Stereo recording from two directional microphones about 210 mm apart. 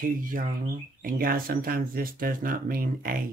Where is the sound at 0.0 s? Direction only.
40° right (ahead or behind).